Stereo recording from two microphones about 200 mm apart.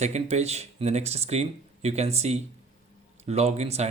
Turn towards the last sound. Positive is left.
turn(degrees=-30)  # may be behind; listen again after turning